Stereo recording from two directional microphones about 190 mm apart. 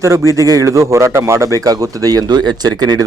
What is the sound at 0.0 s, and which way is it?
A man's voice, 15° right (ahead or behind).